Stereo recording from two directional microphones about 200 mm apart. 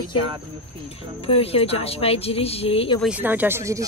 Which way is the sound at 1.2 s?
30° left (ahead or behind).